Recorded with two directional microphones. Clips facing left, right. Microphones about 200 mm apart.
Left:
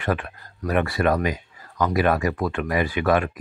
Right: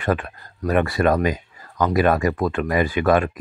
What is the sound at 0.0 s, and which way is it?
Speech, 40° right (ahead or behind).